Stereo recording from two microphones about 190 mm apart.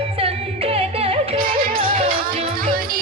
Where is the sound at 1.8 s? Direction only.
30° right (ahead or behind).